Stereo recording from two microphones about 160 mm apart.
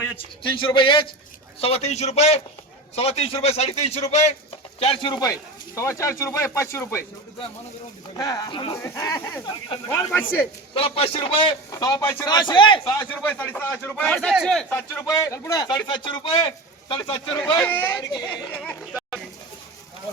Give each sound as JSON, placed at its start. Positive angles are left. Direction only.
{"t": 0.4, "sound": "a man's voice", "side_deg": 30}
{"t": 8.1, "sound": "speech", "side_deg": 20}
{"t": 8.8, "sound": "speech", "side_deg": 15}
{"t": 9.5, "sound": "speech", "side_deg": 30}
{"t": 10.1, "sound": "speech", "side_deg": 10}
{"t": 10.8, "sound": "a man's voice", "side_deg": 35}
{"t": 11.7, "sound": "speech", "side_deg": 20}
{"t": 12.3, "sound": "speech", "side_deg": 30}
{"t": 13.0, "sound": "speech", "side_deg": 10}
{"t": 17.6, "sound": "speech", "side_deg": 10}
{"t": 18.1, "sound": "speech", "side_deg": 25}
{"t": 18.6, "sound": "speech", "side_deg": 5}